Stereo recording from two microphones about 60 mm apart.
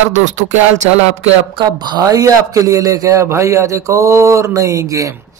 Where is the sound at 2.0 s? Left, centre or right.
Right.